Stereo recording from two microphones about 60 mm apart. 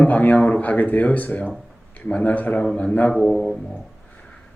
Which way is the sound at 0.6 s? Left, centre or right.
Left.